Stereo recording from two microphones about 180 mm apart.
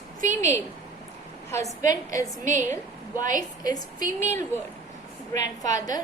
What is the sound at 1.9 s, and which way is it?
Speech, 20° left (ahead or behind).